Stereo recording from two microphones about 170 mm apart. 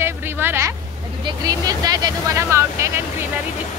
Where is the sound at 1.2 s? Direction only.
20° right (ahead or behind).